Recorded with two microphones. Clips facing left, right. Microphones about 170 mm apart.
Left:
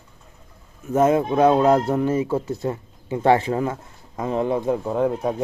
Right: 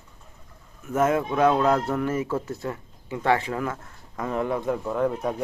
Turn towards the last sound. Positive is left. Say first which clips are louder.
# left 3 dB
turn(degrees=20)  # may be behind; listen again after turning